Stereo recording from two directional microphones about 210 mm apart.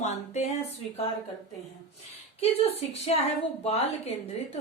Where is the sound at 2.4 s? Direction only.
30° left (ahead or behind).